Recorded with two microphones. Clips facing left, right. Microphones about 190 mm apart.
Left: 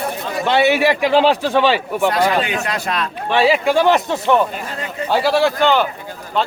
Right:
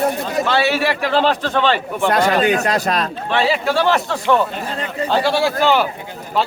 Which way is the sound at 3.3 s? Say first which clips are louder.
Left 4 dB; 15° left (ahead or behind).